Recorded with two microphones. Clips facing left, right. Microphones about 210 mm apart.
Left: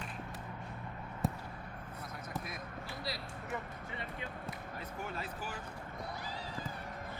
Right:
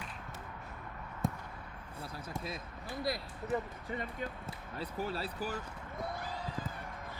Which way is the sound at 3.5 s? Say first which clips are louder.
Right 8 dB; 45° right (ahead or behind).